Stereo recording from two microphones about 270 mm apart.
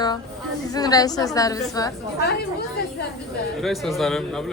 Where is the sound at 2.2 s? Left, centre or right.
Left.